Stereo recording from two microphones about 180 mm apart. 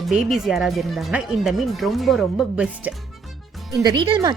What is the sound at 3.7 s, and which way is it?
Speech, 20° right (ahead or behind).